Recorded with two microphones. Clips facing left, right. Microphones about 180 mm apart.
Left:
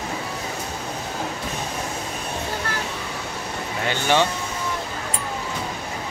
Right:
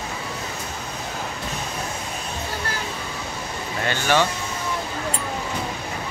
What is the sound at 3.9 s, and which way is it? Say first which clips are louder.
Speech: even; 20° left (ahead or behind).